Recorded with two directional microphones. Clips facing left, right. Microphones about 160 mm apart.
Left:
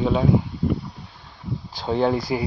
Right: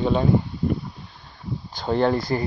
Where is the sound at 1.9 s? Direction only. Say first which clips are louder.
Even; 5° left (ahead or behind).